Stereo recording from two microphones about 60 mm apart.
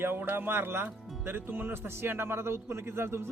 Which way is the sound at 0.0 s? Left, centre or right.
Right.